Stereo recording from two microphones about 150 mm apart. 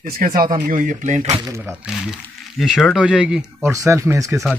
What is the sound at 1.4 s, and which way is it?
Speech, 20° right (ahead or behind).